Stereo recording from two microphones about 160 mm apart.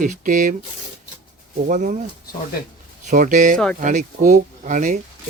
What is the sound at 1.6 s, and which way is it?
Speech, 55° right (ahead or behind).